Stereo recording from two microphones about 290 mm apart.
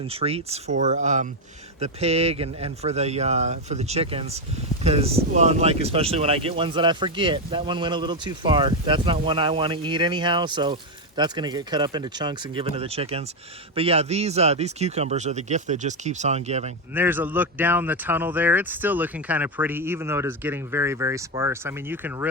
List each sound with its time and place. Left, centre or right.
0.0 s speech: centre
16.9 s speech: centre